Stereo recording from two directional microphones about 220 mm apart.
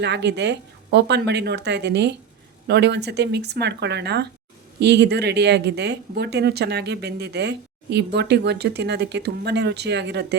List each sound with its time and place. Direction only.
0.0 s speech: 50° right (ahead or behind)